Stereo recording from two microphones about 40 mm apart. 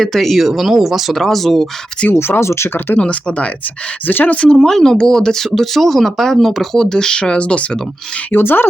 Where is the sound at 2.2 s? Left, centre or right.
Left.